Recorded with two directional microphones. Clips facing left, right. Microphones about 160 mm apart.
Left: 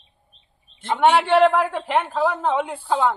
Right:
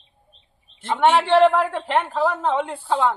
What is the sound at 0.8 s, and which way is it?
A man's voice, centre (ahead or behind).